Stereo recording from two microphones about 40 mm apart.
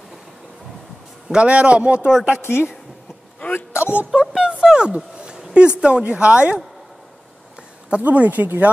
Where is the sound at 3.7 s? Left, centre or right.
Left.